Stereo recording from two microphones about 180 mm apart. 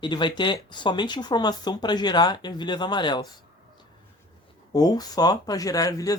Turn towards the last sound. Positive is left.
turn(degrees=20)  # may be behind; listen again after turning